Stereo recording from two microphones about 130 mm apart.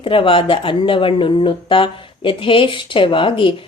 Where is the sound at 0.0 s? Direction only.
40° left (ahead or behind).